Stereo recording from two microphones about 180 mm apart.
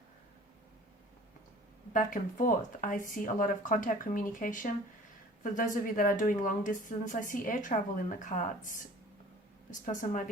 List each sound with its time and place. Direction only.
1.9 s a woman's voice: 45° left (ahead or behind)
9.7 s a woman's voice: 50° left (ahead or behind)